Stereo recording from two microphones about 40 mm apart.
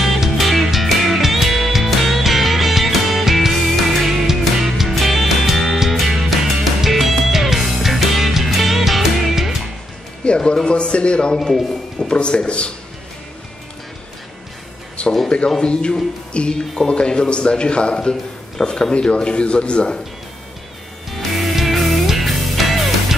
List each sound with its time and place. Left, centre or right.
0.0 s music: centre
10.2 s a man's voice: left
15.2 s a man's voice: left
21.1 s music: centre